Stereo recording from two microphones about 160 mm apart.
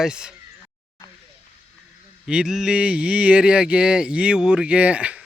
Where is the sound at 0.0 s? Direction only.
5° right (ahead or behind).